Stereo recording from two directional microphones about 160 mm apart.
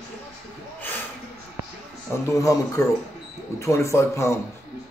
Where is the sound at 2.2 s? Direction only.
20° left (ahead or behind).